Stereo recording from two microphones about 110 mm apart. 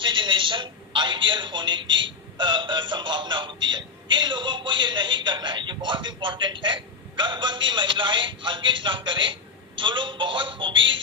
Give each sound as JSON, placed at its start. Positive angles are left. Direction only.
{"t": 0.0, "sound": "a man's voice", "side_deg": -50}